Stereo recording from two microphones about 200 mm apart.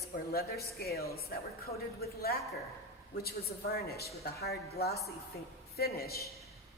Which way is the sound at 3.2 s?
50° left (ahead or behind).